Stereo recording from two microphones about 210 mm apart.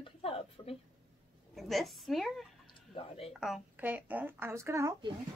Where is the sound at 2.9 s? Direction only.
30° left (ahead or behind).